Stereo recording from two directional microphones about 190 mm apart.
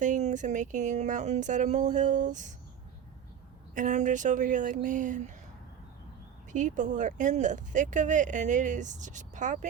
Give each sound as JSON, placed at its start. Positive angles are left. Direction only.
{"t": 0.0, "sound": "speech", "side_deg": -40}
{"t": 3.8, "sound": "speech", "side_deg": -40}
{"t": 6.5, "sound": "speech", "side_deg": -40}